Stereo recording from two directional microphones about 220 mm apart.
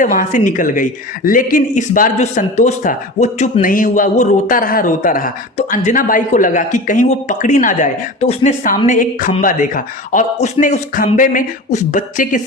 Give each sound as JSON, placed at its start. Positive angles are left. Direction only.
{"t": 0.0, "sound": "speech", "side_deg": 35}